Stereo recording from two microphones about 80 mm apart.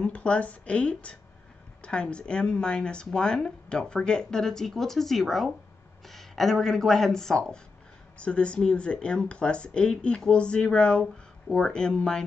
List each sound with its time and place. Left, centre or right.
0.0 s speech: centre